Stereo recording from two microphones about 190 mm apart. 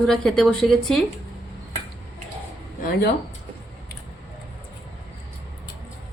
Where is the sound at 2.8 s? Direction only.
55° left (ahead or behind).